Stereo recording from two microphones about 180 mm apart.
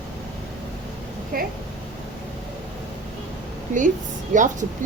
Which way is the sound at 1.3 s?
55° right (ahead or behind).